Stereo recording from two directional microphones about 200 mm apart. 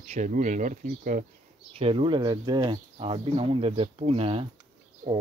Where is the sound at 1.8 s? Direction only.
25° right (ahead or behind).